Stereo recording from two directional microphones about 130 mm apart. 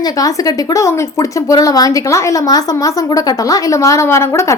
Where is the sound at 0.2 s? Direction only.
25° left (ahead or behind).